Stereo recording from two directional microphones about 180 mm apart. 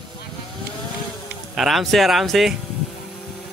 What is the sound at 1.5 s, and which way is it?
Speech, centre (ahead or behind).